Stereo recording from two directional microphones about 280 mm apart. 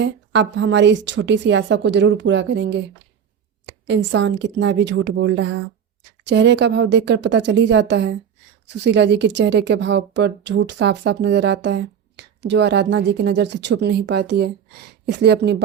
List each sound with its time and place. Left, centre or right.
0.0 s speech: right